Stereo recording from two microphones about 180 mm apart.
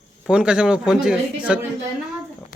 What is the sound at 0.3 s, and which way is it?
Speech, 5° right (ahead or behind).